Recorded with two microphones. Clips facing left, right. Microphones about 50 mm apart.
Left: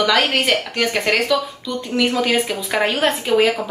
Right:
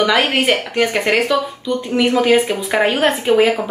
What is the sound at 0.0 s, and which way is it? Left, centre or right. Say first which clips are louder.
A woman's voice: right 2 dB; centre.